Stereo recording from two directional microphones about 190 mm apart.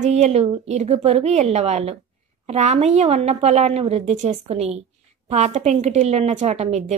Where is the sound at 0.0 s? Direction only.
35° right (ahead or behind).